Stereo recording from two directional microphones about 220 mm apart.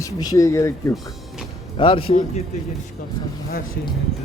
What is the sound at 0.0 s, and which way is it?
Speech, 15° left (ahead or behind).